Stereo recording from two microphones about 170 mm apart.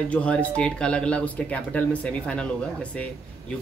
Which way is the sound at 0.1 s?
10° left (ahead or behind).